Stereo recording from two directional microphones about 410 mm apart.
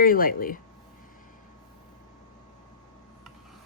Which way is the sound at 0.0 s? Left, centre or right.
Left.